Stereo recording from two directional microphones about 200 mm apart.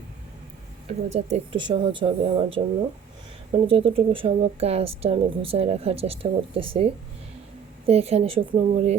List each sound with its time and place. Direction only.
0.9 s speech: 35° right (ahead or behind)